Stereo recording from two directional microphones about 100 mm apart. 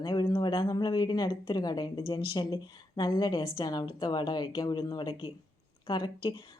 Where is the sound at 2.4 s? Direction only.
50° left (ahead or behind).